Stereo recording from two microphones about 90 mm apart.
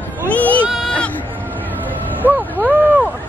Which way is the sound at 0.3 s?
15° left (ahead or behind).